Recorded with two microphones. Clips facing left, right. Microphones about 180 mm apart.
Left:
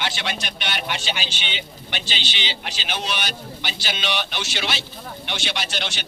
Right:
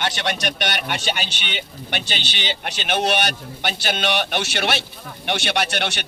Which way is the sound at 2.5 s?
60° right (ahead or behind).